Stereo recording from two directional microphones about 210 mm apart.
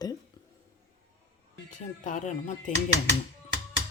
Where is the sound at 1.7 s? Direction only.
35° left (ahead or behind).